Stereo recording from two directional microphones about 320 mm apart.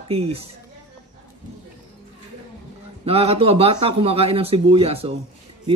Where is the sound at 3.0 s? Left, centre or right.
Centre.